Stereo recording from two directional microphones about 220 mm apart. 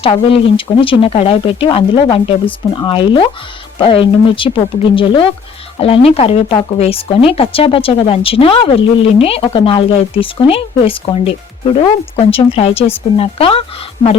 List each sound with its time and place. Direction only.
0.0 s speech: 25° left (ahead or behind)